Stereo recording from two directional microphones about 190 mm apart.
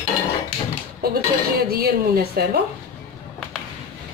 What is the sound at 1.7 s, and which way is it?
Speech, 55° right (ahead or behind).